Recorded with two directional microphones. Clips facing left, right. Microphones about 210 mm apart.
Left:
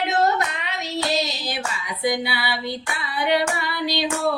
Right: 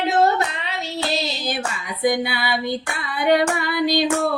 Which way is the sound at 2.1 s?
50° right (ahead or behind).